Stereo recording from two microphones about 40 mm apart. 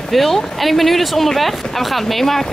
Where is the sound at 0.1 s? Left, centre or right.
Centre.